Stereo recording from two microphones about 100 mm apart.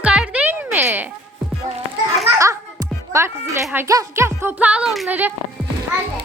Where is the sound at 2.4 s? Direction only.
30° right (ahead or behind); by 4.9 s 15° right (ahead or behind).